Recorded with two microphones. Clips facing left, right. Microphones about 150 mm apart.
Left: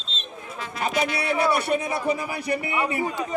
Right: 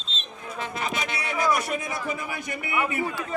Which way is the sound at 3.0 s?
20° left (ahead or behind).